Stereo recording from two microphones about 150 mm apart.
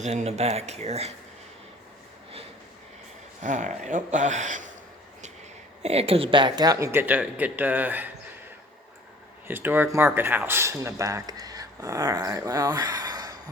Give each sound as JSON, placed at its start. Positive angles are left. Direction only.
{"t": 0.0, "sound": "speech", "side_deg": -50}
{"t": 3.4, "sound": "speech", "side_deg": -55}
{"t": 5.8, "sound": "speech", "side_deg": -45}
{"t": 9.5, "sound": "speech", "side_deg": -15}